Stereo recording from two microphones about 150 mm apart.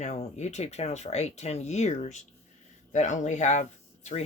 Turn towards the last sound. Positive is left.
turn(degrees=50)  # may be behind; listen again after turning